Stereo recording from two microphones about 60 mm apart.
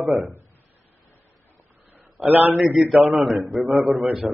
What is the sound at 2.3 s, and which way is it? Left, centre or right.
Speech, right.